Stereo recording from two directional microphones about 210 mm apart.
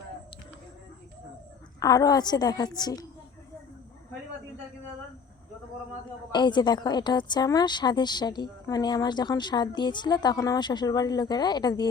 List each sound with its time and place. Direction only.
1.8 s a woman's voice: 15° left (ahead or behind)
6.3 s a woman's voice: 20° left (ahead or behind)